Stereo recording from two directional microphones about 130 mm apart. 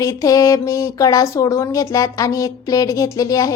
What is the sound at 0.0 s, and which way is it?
A woman's voice, 25° left (ahead or behind).